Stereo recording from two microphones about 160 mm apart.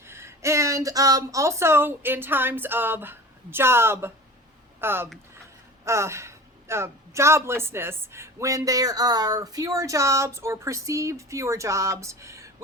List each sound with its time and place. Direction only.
0.1 s a woman's voice: 15° right (ahead or behind)